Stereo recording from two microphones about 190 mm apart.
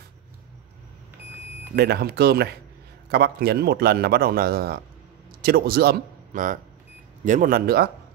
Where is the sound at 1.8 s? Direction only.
55° right (ahead or behind).